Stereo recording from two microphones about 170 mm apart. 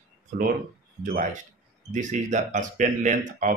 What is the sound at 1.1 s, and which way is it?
Speech, 50° right (ahead or behind).